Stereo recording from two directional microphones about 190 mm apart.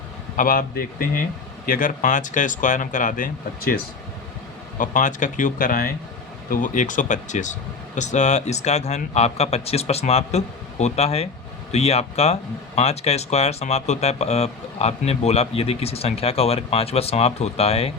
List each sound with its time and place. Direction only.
0.3 s speech: 50° left (ahead or behind)
4.8 s speech: 40° left (ahead or behind)